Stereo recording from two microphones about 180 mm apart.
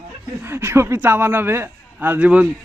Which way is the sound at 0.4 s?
15° right (ahead or behind).